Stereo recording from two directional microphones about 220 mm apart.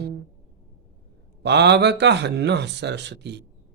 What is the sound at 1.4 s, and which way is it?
Mantra, 50° right (ahead or behind).